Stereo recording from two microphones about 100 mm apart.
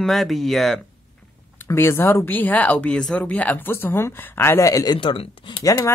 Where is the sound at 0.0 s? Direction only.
Centre (ahead or behind).